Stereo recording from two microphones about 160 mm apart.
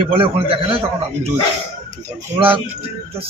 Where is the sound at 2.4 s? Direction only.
35° right (ahead or behind).